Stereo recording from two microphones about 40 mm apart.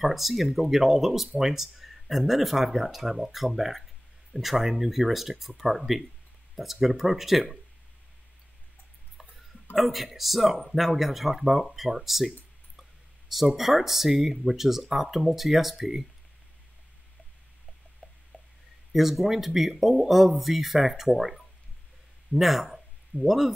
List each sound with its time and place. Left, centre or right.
0.0 s speech: centre
9.8 s speech: centre
13.6 s speech: centre
18.3 s a sound: left
18.9 s speech: centre